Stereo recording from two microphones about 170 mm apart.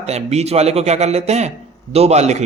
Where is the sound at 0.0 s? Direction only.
40° right (ahead or behind).